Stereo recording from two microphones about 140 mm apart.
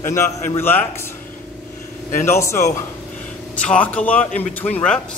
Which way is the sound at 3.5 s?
10° left (ahead or behind).